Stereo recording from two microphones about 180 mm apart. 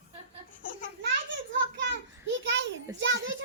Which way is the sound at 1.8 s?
85° right.